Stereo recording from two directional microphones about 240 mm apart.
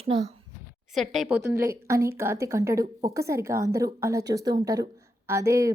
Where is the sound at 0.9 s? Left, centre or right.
Centre.